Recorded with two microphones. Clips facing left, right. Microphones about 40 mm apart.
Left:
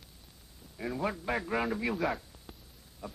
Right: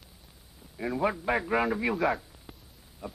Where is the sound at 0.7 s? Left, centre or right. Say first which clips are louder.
Right 5 dB; centre.